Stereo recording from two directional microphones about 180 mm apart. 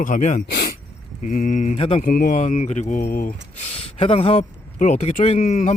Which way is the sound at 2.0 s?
50° left (ahead or behind).